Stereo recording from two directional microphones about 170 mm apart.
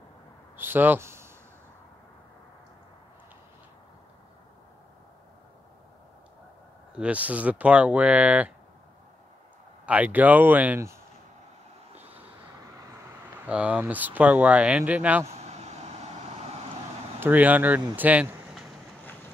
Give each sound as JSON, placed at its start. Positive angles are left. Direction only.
{"t": 0.6, "sound": "speech", "side_deg": -10}
{"t": 7.0, "sound": "speech", "side_deg": -10}
{"t": 9.8, "sound": "speech", "side_deg": -10}
{"t": 13.5, "sound": "speech", "side_deg": -10}
{"t": 15.2, "sound": "vehicle", "side_deg": -40}
{"t": 17.2, "sound": "speech", "side_deg": -10}